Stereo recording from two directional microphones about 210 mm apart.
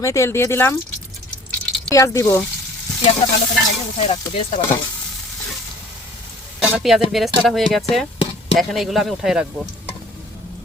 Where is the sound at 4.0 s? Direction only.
30° left (ahead or behind).